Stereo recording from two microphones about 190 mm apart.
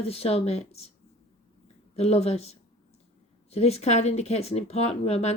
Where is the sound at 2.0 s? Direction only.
35° left (ahead or behind).